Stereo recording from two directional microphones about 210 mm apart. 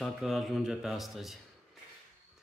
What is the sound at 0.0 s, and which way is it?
Speech, centre (ahead or behind).